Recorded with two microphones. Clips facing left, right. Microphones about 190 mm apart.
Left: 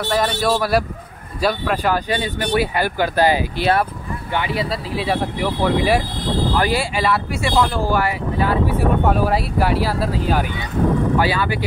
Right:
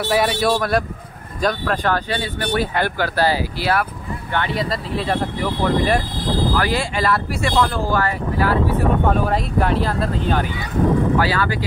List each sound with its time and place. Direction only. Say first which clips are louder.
0.1 s a man's voice: right 1 dB; 10° right (ahead or behind); by 3.8 s 20° left (ahead or behind)
4.3 s speech: even; 5° left (ahead or behind)
11.1 s speech: even; 15° left (ahead or behind)